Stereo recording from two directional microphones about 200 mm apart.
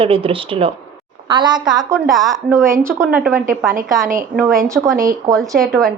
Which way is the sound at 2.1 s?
Centre (ahead or behind).